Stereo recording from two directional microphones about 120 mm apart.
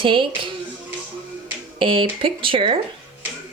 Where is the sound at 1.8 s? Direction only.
45° right (ahead or behind).